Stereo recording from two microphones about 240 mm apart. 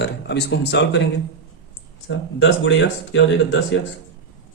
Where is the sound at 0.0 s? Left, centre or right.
Left.